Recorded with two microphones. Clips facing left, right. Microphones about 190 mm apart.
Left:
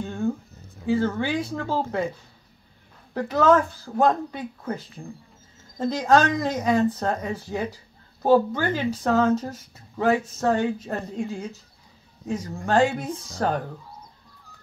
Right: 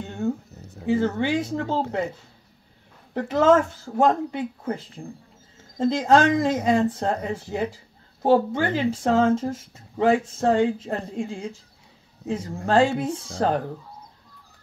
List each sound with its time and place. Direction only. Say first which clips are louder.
0.0 s a sound: left 1 dB; 20° right (ahead or behind)
0.8 s speech: right 1 dB; 20° right (ahead or behind)
3.2 s speech: right 1 dB; 25° right (ahead or behind)